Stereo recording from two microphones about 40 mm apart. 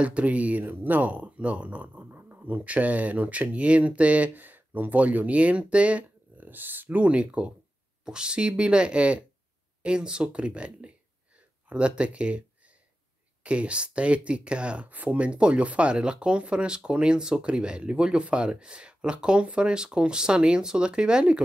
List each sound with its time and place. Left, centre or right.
0.0 s speech: right
4.4 s a sound: right
4.9 s speech: right
6.4 s speech: right
7.0 s speech: right
14.9 s speech: right
15.9 s speech: right